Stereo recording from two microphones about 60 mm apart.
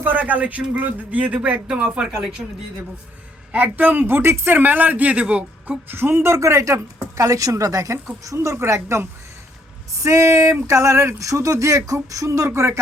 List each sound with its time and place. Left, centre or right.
0.0 s speech: right
3.5 s speech: right
5.9 s speech: right
6.2 s a woman's voice: right
8.4 s a sound: right
11.2 s a woman's voice: right
12.5 s a sound: right